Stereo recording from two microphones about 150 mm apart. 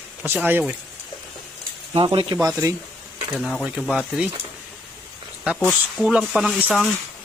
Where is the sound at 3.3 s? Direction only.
5° left (ahead or behind).